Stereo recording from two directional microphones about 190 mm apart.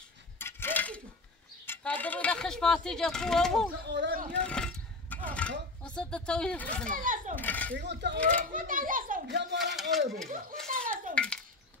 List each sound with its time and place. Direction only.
0.4 s a sound: 10° left (ahead or behind)
1.7 s speech: 10° left (ahead or behind)
3.8 s speech: 65° right (ahead or behind)
4.4 s speech: 5° left (ahead or behind)
7.0 s a child's voice: 45° right (ahead or behind)
7.3 s speech: 10° left (ahead or behind)
7.7 s speech: 65° right (ahead or behind)
8.4 s a child's voice: 45° right (ahead or behind)
9.3 s speech: 65° right (ahead or behind)
9.6 s speech: centre (ahead or behind)
10.3 s a child's voice: 45° right (ahead or behind)
11.2 s speech: 5° left (ahead or behind)